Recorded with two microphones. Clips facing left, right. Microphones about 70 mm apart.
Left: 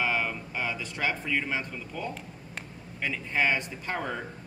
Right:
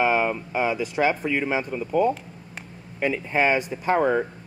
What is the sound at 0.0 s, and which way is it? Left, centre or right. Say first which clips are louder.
Speech: right 8 dB; right.